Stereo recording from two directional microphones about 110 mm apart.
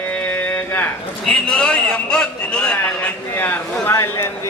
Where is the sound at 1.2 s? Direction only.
10° left (ahead or behind).